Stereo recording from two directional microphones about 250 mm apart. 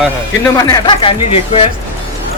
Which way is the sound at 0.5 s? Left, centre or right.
Centre.